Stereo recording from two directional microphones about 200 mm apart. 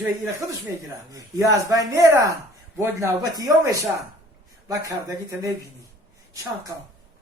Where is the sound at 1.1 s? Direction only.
15° right (ahead or behind).